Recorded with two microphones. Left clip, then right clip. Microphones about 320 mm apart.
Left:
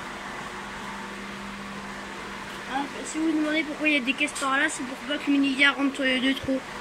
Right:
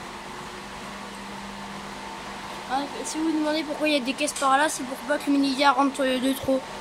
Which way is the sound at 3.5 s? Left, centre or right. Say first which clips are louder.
Even; centre.